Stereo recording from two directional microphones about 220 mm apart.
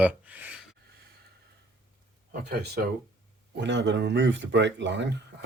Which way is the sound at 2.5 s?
45° right (ahead or behind).